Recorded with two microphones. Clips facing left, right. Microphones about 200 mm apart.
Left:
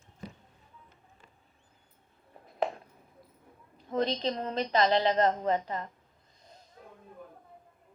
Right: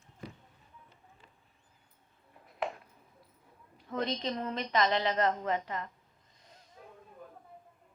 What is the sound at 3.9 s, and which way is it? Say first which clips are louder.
A woman's voice: left 4 dB; 30° left (ahead or behind).